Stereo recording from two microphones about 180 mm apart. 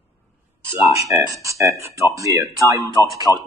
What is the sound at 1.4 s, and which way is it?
Speech, 15° right (ahead or behind).